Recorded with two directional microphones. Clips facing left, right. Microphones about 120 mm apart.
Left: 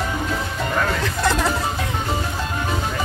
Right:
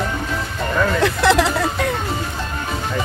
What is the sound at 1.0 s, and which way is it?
Speech, 75° right (ahead or behind).